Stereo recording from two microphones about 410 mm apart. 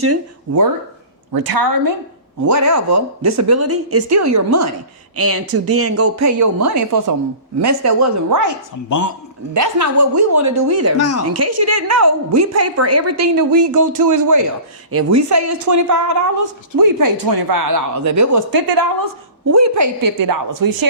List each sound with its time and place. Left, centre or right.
1.3 s a woman's voice: right
2.4 s speech: right
8.9 s a man's voice: left
9.6 s speech: right
10.9 s speech: left
11.3 s speech: right
19.5 s speech: right